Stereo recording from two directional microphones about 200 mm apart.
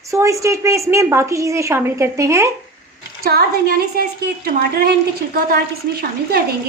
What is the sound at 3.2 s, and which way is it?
Speech, 50° right (ahead or behind).